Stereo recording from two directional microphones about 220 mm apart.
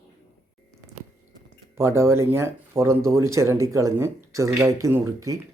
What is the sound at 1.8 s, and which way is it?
Speech, 10° right (ahead or behind).